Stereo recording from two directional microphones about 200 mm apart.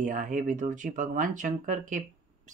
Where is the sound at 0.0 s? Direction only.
40° right (ahead or behind).